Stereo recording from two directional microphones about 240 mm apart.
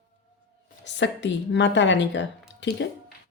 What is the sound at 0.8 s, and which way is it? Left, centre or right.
A woman's voice, left.